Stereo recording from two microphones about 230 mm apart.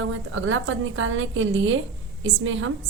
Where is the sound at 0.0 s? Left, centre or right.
Right.